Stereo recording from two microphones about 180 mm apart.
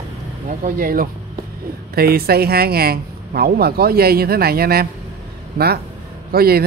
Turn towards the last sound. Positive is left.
turn(degrees=-60)  # may be behind; listen again after turning